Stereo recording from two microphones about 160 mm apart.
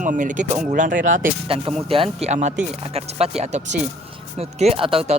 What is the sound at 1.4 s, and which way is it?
Speech, 35° right (ahead or behind).